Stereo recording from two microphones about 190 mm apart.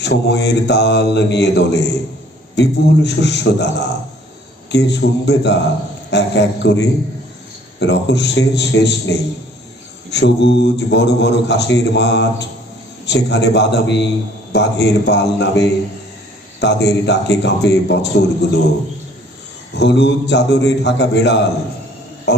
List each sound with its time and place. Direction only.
0.0 s a man's voice: 65° left (ahead or behind)
10.1 s a man's voice: 65° left (ahead or behind)
19.8 s a man's voice: 65° left (ahead or behind)
22.3 s a sound: 65° left (ahead or behind)